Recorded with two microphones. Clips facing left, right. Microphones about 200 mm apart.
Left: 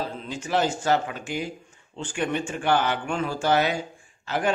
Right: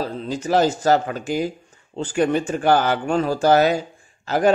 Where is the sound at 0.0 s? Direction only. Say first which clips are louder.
Right 6 dB; 40° right (ahead or behind).